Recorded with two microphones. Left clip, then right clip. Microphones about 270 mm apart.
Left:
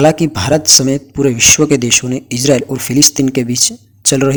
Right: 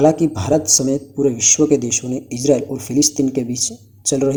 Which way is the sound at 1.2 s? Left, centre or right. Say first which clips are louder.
Left 5 dB; left.